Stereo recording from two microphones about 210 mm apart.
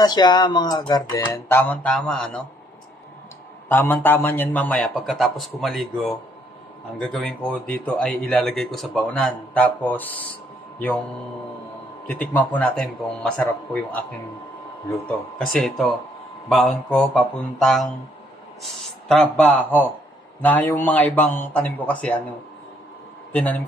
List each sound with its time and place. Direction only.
0.0 s speech: 20° left (ahead or behind)
1.7 s speech: 5° left (ahead or behind)
3.6 s a man's voice: 10° left (ahead or behind)
12.1 s a man's voice: 5° left (ahead or behind)
15.3 s a man's voice: 5° left (ahead or behind)
23.3 s a man's voice: 5° left (ahead or behind)